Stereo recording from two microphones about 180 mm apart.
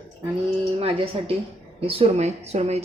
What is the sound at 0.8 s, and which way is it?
A woman's voice, 30° right (ahead or behind).